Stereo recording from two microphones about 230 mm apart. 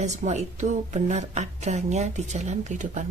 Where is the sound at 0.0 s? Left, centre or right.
Right.